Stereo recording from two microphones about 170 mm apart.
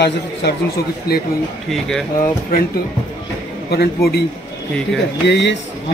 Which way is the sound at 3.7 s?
70° left (ahead or behind).